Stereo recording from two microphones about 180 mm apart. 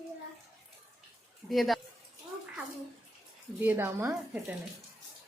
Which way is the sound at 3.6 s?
10° right (ahead or behind).